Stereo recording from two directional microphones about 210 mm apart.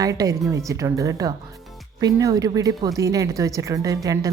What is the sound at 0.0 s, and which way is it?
Speech, 15° right (ahead or behind).